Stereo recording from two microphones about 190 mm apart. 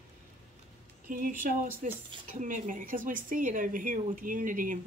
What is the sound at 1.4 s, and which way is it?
Speech, 45° right (ahead or behind).